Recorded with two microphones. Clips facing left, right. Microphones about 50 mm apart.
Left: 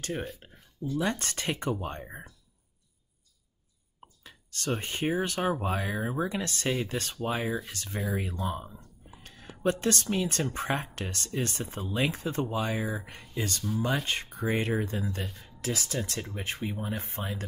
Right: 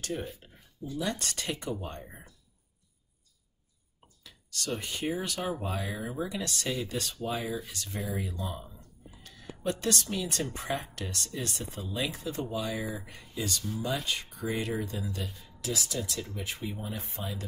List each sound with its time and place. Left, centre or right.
0.1 s speech: left
4.2 s speech: left
9.1 s a sound: left
10.5 s speech: left